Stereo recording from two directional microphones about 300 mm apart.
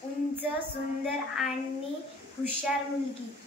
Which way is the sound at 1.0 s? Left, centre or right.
Centre.